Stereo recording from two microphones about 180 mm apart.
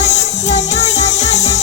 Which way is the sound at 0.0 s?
40° left (ahead or behind).